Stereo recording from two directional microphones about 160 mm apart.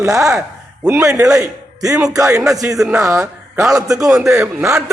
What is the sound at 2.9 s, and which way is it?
A man's voice, 20° right (ahead or behind).